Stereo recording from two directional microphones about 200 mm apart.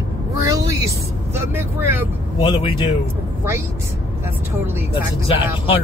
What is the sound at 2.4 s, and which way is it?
Speech, 25° left (ahead or behind).